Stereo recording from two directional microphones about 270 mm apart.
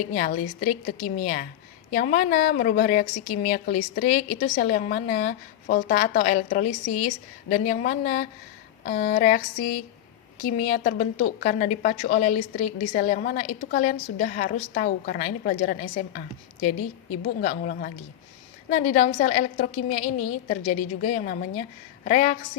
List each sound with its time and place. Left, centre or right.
0.1 s a woman's voice: left
10.6 s a woman's voice: left
16.6 s a woman's voice: left
17.4 s a woman's voice: left